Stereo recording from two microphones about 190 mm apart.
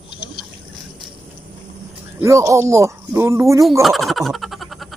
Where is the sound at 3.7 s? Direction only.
Centre (ahead or behind).